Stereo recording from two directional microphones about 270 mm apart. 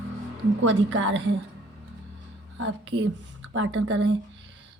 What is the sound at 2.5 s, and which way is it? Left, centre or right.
A woman's voice, right.